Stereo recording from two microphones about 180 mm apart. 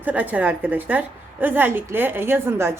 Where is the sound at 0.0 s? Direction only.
10° right (ahead or behind).